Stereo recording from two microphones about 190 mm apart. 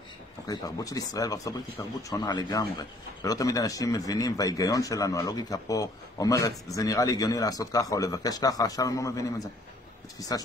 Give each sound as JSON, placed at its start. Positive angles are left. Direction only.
{"t": 0.5, "sound": "speech", "side_deg": 20}